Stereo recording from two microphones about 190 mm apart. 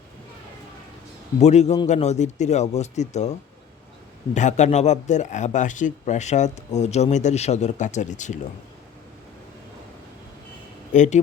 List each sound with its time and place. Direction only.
1.4 s speech: 35° left (ahead or behind)
4.4 s speech: 40° left (ahead or behind)
10.9 s speech: 40° left (ahead or behind)